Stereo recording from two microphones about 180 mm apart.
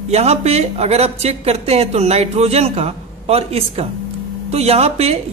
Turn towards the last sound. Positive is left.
turn(degrees=-35)  # may be behind; listen again after turning